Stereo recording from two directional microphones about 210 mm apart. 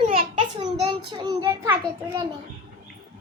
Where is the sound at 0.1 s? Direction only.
25° right (ahead or behind).